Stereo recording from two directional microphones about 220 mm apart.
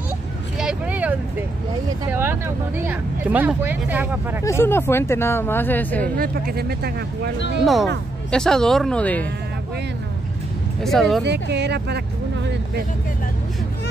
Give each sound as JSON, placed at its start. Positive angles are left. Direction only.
{"t": 0.6, "sound": "vehicle", "side_deg": -5}
{"t": 2.0, "sound": "speech", "side_deg": -10}
{"t": 4.5, "sound": "speech", "side_deg": 10}
{"t": 6.1, "sound": "speech", "side_deg": -40}
{"t": 7.6, "sound": "speech", "side_deg": 0}
{"t": 10.8, "sound": "speech", "side_deg": 0}
{"t": 11.2, "sound": "speech", "side_deg": -50}